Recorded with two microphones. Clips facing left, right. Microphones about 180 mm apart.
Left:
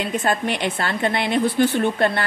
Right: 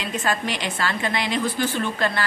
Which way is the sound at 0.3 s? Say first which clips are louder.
Left 2 dB; 60° left (ahead or behind).